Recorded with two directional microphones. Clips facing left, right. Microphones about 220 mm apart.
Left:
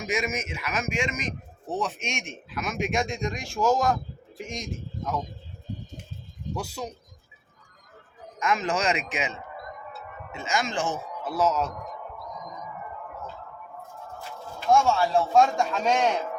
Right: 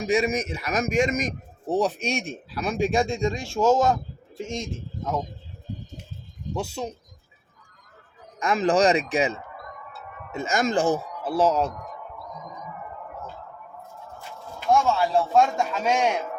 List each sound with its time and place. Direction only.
0.0 s a man's voice: 35° right (ahead or behind)
6.6 s speech: 25° right (ahead or behind)
8.4 s speech: 35° right (ahead or behind)
14.7 s speech: 5° right (ahead or behind)